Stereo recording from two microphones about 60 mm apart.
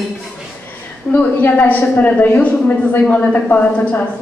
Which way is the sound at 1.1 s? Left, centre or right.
Left.